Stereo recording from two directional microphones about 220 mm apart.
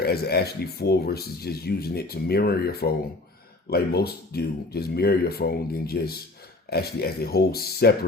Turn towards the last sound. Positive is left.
turn(degrees=45)  # may be behind; listen again after turning